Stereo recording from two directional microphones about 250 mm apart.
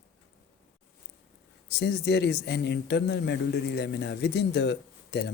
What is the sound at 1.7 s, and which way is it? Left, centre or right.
Speech, left.